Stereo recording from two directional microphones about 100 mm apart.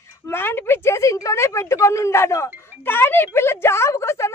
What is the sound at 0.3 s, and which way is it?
A woman's voice, 20° left (ahead or behind).